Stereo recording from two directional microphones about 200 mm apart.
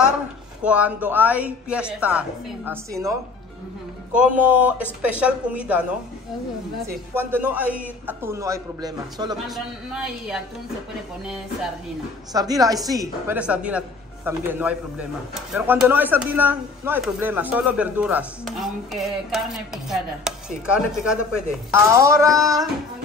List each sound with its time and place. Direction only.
0.7 s a man's voice: 5° right (ahead or behind)
4.2 s a man's voice: 5° right (ahead or behind)
7.2 s a man's voice: 10° right (ahead or behind)
9.5 s speech: 5° right (ahead or behind)
12.3 s a man's voice: 20° right (ahead or behind)
13.4 s a man's voice: 5° right (ahead or behind)